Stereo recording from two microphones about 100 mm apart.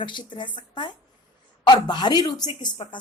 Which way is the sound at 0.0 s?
50° left (ahead or behind).